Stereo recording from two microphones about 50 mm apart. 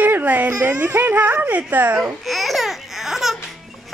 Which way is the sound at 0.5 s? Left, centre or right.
Right.